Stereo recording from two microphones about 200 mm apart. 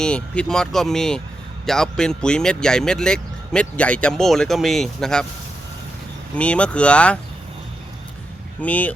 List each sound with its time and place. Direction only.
0.0 s speech: 5° left (ahead or behind)
6.3 s speech: 5° left (ahead or behind)
8.6 s speech: 5° left (ahead or behind)